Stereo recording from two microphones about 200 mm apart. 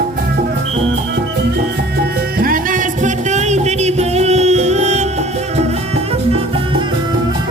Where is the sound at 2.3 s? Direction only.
45° right (ahead or behind).